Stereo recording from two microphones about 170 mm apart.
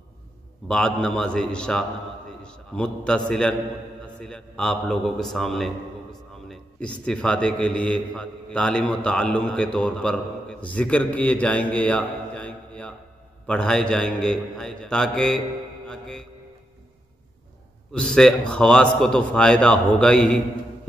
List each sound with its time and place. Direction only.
0.7 s a man's voice: 5° left (ahead or behind)
17.9 s a man's voice: 5° left (ahead or behind)